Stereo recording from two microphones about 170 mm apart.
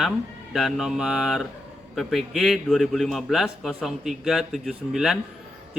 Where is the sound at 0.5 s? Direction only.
Centre (ahead or behind).